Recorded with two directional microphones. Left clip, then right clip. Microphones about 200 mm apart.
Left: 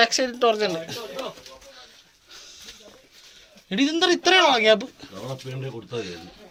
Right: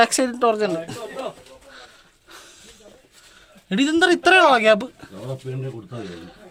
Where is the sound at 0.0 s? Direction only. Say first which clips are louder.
Right 2 dB; 45° right (ahead or behind).